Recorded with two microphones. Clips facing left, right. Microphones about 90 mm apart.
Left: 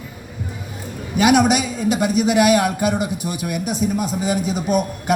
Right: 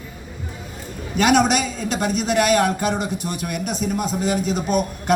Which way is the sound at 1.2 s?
5° left (ahead or behind).